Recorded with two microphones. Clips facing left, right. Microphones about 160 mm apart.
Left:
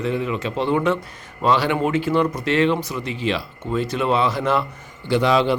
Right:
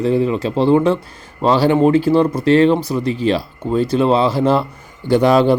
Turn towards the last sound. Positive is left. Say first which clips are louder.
# right 6 dB
turn(degrees=-45)  # may be behind; listen again after turning